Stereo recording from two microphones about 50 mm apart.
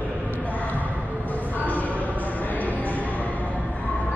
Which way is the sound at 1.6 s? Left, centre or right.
Left.